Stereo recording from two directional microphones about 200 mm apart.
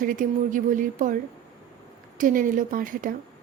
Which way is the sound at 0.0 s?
40° right (ahead or behind).